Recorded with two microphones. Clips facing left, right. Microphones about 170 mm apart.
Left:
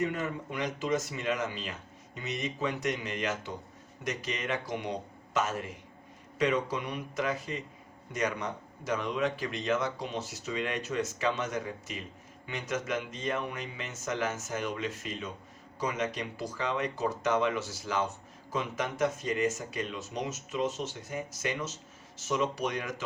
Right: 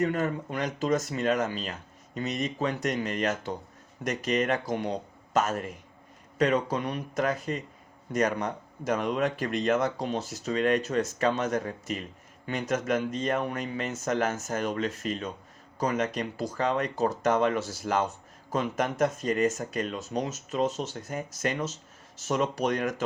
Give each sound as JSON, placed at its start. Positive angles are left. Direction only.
{"t": 0.0, "sound": "a man's voice", "side_deg": -40}
{"t": 8.9, "sound": "speech", "side_deg": -55}